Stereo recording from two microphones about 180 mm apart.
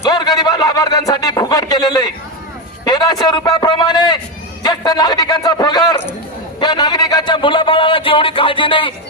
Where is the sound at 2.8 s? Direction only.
20° left (ahead or behind).